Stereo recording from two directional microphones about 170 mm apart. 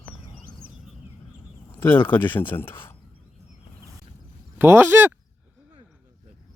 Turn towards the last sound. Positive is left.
turn(degrees=-10)  # may be behind; listen again after turning